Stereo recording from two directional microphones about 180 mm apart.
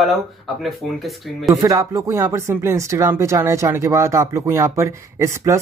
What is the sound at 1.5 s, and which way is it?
Speech, 20° right (ahead or behind).